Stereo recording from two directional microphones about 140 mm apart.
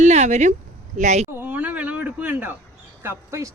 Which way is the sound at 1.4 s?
10° right (ahead or behind).